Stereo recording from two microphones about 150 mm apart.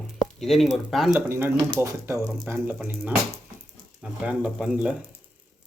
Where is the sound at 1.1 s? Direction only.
15° right (ahead or behind).